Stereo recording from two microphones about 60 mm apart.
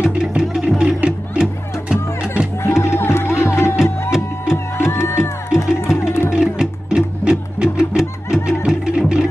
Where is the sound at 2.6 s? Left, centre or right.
Left.